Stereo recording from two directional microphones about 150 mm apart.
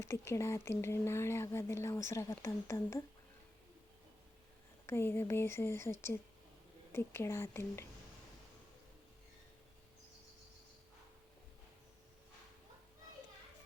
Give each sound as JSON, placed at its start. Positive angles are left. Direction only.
{"t": 0.0, "sound": "speech", "side_deg": 20}
{"t": 4.9, "sound": "speech", "side_deg": 15}